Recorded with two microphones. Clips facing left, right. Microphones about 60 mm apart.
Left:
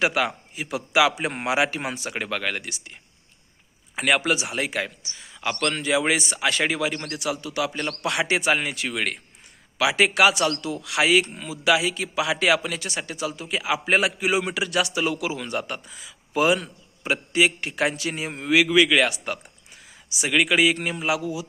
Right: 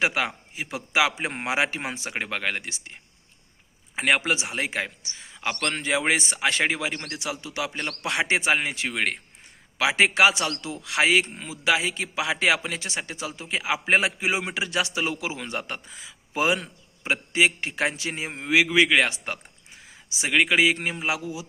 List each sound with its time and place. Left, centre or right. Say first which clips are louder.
0.0 s a man's voice: left 2 dB; right
3.9 s a man's voice: left 1 dB; right